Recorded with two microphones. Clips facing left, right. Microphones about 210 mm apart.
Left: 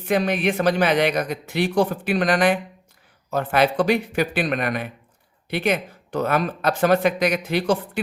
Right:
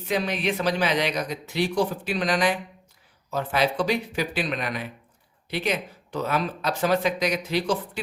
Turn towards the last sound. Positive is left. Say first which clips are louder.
# left 4 dB
turn(degrees=55)  # may be behind; listen again after turning